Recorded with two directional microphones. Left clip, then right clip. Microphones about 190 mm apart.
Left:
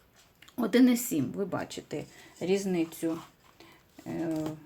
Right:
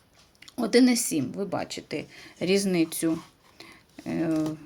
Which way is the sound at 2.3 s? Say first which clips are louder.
Right 5 dB; 45° right (ahead or behind).